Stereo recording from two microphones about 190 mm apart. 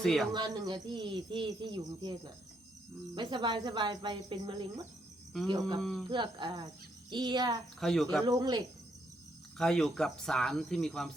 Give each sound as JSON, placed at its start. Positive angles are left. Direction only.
{"t": 0.0, "sound": "speech", "side_deg": 0}
{"t": 0.3, "sound": "speech", "side_deg": -20}
{"t": 3.2, "sound": "speech", "side_deg": -25}
{"t": 5.8, "sound": "speech", "side_deg": 0}
{"t": 6.1, "sound": "speech", "side_deg": -25}
{"t": 7.8, "sound": "speech", "side_deg": 0}
{"t": 8.2, "sound": "speech", "side_deg": -20}
{"t": 9.6, "sound": "speech", "side_deg": 5}